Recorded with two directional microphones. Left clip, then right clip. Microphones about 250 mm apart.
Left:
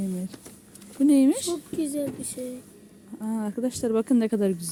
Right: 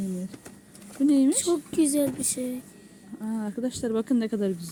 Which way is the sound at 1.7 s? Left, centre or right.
Right.